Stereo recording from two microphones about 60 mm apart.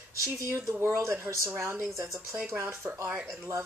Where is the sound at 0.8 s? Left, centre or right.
Right.